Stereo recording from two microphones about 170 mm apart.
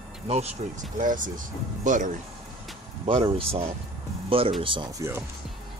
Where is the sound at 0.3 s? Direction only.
45° right (ahead or behind).